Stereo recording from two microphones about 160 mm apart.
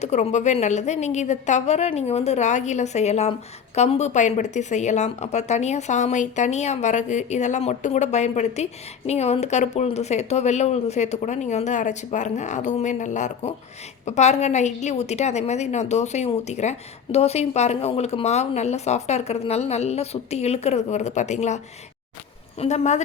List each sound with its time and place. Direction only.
0.0 s a woman's voice: 45° left (ahead or behind)